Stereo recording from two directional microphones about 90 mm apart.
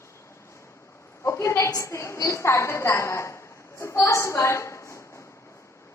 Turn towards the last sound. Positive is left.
turn(degrees=30)  # may be behind; listen again after turning